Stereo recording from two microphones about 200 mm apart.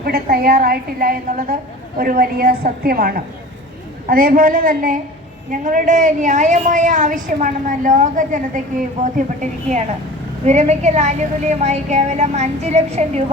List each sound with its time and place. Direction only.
0.0 s a woman's voice: 50° right (ahead or behind)
10.4 s a woman's voice: 35° right (ahead or behind)